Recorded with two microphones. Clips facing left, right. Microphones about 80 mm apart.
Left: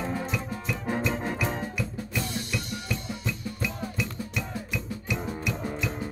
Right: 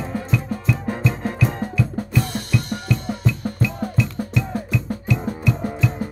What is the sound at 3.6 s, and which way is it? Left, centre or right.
Music, centre.